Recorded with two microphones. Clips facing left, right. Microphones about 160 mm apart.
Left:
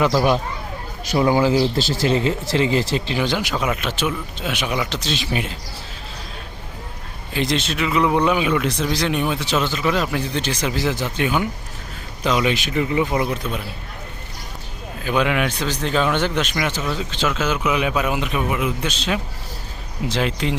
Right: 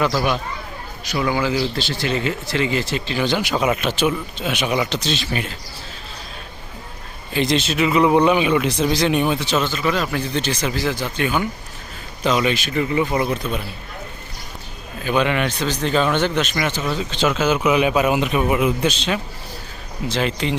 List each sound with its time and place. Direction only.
1.1 s speech: 35° left (ahead or behind)
3.2 s a man's voice: 5° left (ahead or behind)
3.5 s a man's voice: 10° right (ahead or behind)
5.2 s a man's voice: 15° left (ahead or behind)
7.3 s a man's voice: centre (ahead or behind)
9.7 s a man's voice: 10° left (ahead or behind)
15.0 s a man's voice: 5° left (ahead or behind)
16.8 s a man's voice: centre (ahead or behind)